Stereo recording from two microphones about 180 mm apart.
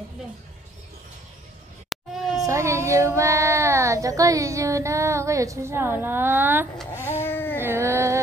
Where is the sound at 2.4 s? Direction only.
15° right (ahead or behind).